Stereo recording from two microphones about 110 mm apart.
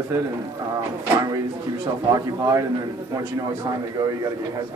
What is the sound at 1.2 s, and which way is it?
Speech, 30° right (ahead or behind).